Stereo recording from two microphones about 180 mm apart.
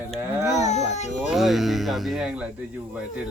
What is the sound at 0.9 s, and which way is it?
Baby cry, 40° left (ahead or behind).